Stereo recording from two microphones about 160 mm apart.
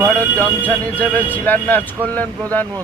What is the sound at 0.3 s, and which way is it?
Speech, 10° left (ahead or behind).